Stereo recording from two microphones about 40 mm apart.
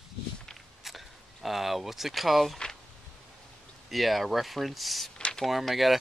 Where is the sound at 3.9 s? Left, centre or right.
Centre.